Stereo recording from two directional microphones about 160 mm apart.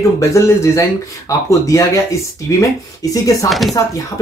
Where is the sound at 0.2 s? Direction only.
20° left (ahead or behind).